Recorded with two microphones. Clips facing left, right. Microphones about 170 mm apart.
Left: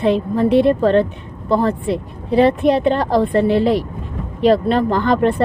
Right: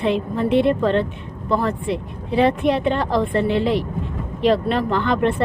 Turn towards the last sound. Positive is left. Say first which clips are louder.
# left 4 dB
turn(degrees=40)  # may be behind; listen again after turning